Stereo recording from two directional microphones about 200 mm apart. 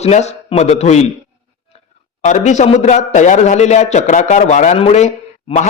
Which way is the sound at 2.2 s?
35° left (ahead or behind).